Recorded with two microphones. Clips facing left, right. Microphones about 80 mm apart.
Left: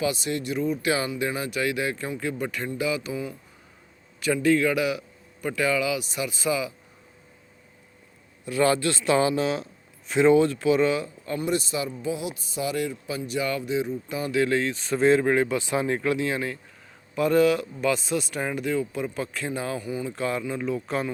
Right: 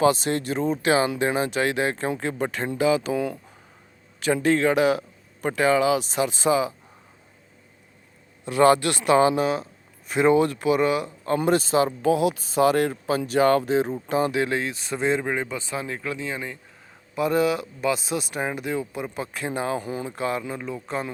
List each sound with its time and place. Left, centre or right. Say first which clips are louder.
0.0 s speech: right 6 dB; right
3.1 s a man's voice: right 6 dB; right
4.4 s speech: right 2 dB; right
8.4 s speech: right 5 dB; right
8.7 s a man's voice: right 3 dB; right
9.1 s speech: right 5 dB; right
10.1 s a man's voice: left 1 dB; right
11.4 s speech: right 7 dB; right
11.9 s speech: right 9 dB; right
14.3 s speech: left 1 dB; centre
15.4 s speech: left 5 dB; centre
17.2 s speech: left 2 dB; centre; by 19.8 s right
19.8 s speech: even; right
20.1 s speech: even; centre